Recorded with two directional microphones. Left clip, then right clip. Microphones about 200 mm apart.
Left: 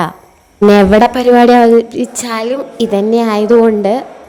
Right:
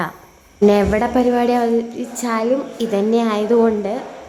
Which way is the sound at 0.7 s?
30° left (ahead or behind).